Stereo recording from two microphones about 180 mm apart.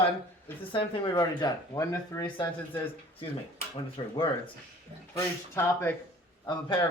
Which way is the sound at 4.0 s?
25° left (ahead or behind).